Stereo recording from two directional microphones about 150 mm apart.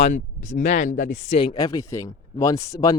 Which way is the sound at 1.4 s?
30° left (ahead or behind).